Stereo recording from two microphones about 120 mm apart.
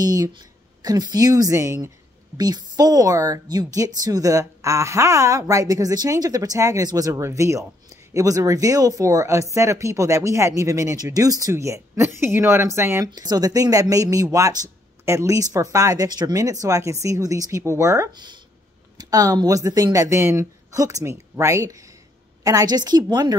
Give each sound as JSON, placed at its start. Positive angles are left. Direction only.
{"t": 0.0, "sound": "a woman's voice", "side_deg": -30}
{"t": 18.1, "sound": "a woman's voice", "side_deg": -40}